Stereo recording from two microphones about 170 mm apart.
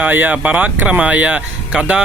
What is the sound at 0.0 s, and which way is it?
Speech, 10° right (ahead or behind).